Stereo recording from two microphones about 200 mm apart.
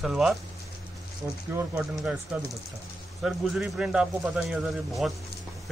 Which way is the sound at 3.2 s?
Centre (ahead or behind).